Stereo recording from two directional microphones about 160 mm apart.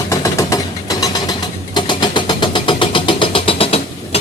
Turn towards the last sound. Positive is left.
turn(degrees=40)  # may be behind; listen again after turning